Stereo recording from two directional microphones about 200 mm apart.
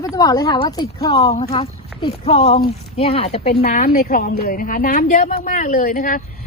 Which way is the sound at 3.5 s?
50° left (ahead or behind).